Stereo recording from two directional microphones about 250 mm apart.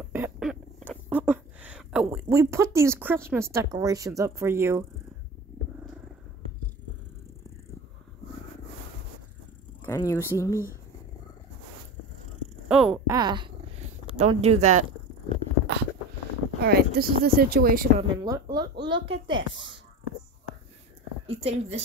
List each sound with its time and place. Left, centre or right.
0.1 s a sound: centre
3.5 s speech: centre
9.8 s speech: centre
12.6 s a sound: centre
13.1 s dog: centre
14.1 s speech: right
16.6 s speech: right
18.1 s speech: centre
21.3 s speech: right